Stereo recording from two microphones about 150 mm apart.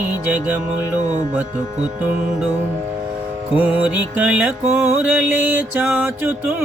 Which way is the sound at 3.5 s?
10° right (ahead or behind).